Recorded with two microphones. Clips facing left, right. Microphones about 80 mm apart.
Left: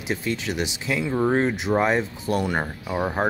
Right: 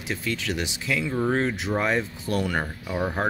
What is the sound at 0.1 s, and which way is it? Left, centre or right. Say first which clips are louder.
Speech: left 2 dB; left.